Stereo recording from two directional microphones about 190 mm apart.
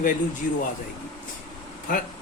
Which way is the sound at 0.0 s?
45° left (ahead or behind).